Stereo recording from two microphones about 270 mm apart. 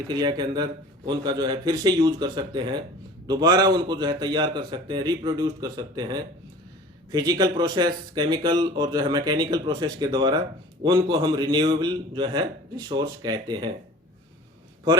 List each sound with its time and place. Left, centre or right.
0.1 s speech: centre